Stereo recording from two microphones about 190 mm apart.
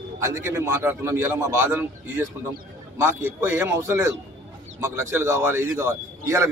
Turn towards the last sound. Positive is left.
turn(degrees=-15)  # may be behind; listen again after turning